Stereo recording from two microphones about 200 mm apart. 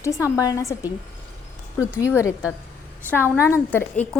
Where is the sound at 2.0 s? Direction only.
15° left (ahead or behind).